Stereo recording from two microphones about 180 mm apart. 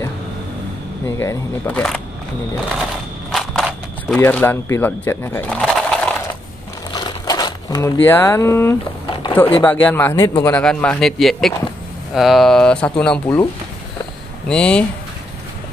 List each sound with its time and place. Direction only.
1.1 s speech: 15° left (ahead or behind)
3.3 s a sound: centre (ahead or behind)
4.2 s speech: 10° left (ahead or behind)
6.9 s crumpling: 25° left (ahead or behind)
9.0 s a sound: 25° left (ahead or behind)
9.6 s speech: 10° left (ahead or behind)
14.5 s speech: 5° left (ahead or behind)